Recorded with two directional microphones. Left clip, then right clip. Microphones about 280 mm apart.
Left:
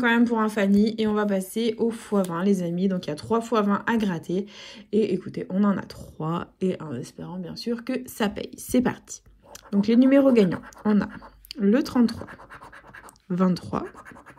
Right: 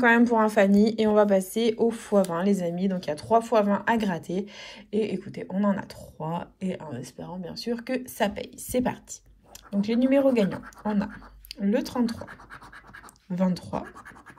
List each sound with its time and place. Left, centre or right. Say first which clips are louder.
0.0 s a woman's voice: right 2 dB; centre
13.4 s speech: left 3 dB; centre